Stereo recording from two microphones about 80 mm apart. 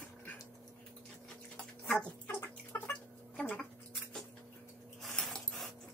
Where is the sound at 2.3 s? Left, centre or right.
Left.